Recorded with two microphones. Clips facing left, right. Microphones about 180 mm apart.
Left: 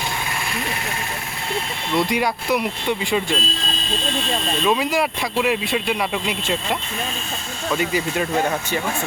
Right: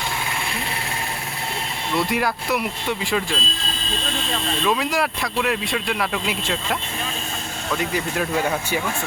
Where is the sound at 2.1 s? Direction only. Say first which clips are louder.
Left 2 dB; centre (ahead or behind).